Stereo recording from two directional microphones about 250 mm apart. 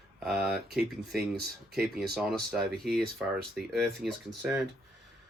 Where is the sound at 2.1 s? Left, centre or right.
Centre.